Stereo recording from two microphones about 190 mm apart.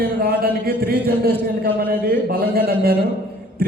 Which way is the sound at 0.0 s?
55° right (ahead or behind).